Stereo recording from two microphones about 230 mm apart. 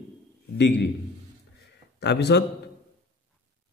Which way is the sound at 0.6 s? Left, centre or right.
Left.